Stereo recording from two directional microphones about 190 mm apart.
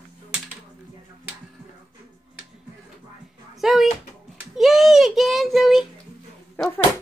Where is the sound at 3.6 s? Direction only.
Centre (ahead or behind).